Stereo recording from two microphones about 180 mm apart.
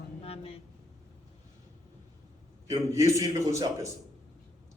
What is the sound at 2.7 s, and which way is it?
A man's voice, 15° right (ahead or behind).